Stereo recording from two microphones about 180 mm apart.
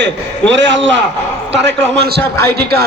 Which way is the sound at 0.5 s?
80° right.